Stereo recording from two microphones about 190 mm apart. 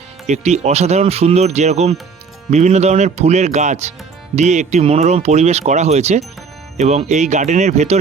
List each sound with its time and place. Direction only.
0.3 s speech: 35° right (ahead or behind)